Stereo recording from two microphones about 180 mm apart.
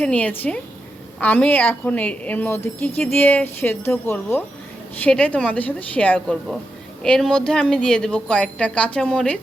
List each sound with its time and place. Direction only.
0.0 s a woman's voice: 10° left (ahead or behind)